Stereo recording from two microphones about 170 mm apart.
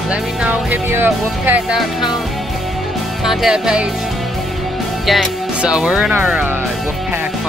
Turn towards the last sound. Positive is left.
turn(degrees=-10)  # may be behind; listen again after turning